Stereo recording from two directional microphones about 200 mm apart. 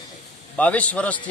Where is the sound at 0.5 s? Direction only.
5° left (ahead or behind).